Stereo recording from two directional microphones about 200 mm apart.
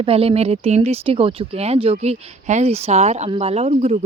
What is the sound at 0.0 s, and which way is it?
Speech, 30° right (ahead or behind).